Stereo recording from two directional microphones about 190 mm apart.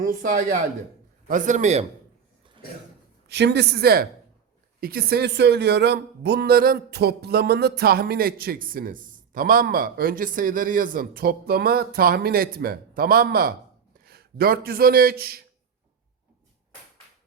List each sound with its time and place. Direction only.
0.0 s a man's voice: 45° right (ahead or behind)
3.2 s speech: 60° right (ahead or behind)